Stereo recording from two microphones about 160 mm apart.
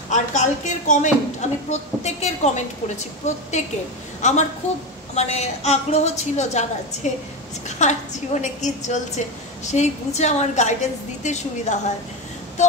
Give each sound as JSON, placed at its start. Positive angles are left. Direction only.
{"t": 0.1, "sound": "a woman's voice", "side_deg": 50}